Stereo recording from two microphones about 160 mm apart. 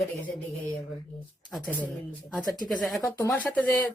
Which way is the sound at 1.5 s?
5° left (ahead or behind).